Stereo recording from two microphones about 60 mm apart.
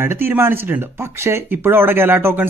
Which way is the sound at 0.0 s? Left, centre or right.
Right.